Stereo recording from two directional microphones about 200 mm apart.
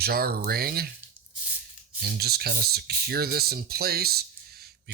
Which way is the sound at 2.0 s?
50° right (ahead or behind).